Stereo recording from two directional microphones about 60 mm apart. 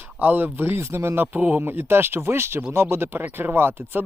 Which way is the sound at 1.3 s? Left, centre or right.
Right.